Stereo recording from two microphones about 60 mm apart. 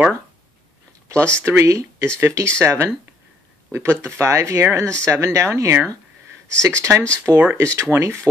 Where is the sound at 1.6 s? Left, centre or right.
Right.